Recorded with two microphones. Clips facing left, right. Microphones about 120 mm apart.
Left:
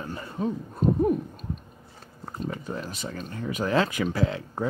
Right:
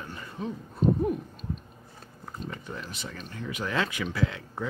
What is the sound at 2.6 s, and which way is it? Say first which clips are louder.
Speech: left 5 dB; 40° left (ahead or behind).